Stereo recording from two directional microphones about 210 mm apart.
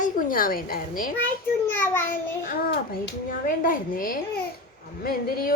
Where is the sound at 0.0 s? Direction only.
40° left (ahead or behind).